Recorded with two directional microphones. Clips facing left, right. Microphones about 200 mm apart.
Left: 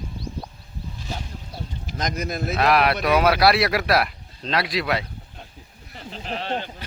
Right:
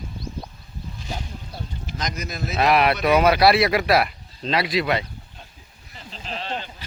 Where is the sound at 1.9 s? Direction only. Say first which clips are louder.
Left 4 dB; 50° left (ahead or behind).